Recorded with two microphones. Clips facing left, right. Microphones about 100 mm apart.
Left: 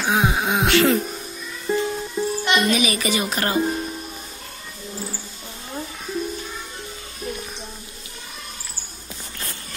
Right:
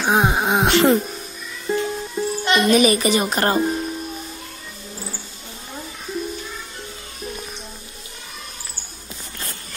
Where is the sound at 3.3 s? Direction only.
40° right (ahead or behind).